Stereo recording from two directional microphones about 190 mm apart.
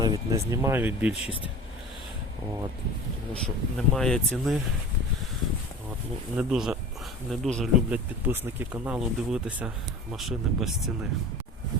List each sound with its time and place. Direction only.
0.0 s speech: 20° right (ahead or behind)
3.4 s speech: 5° left (ahead or behind)
6.3 s speech: 5° right (ahead or behind)